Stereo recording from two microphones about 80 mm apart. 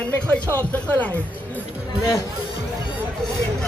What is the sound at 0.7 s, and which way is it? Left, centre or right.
Speech, left.